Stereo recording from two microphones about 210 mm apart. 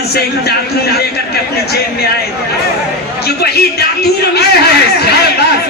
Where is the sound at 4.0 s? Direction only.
50° left (ahead or behind).